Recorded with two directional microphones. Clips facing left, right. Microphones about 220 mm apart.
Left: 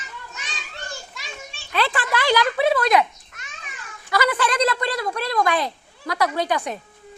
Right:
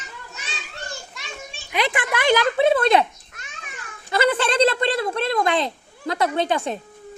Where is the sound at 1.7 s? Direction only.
15° right (ahead or behind).